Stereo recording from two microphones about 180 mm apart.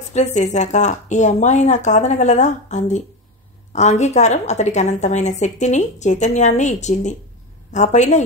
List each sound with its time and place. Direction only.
0.1 s a woman's voice: 40° left (ahead or behind)